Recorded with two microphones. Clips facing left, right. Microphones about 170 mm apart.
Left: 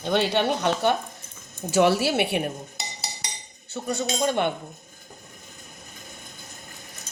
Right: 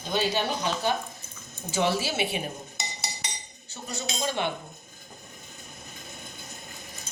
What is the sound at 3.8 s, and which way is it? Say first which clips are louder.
Speech: left 7 dB; 55° left (ahead or behind).